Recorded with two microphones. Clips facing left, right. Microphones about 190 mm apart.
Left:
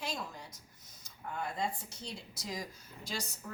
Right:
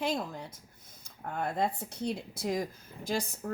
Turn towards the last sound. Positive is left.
turn(degrees=-55)  # may be behind; listen again after turning